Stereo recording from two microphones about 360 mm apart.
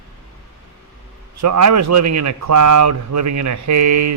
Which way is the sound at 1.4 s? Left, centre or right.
Right.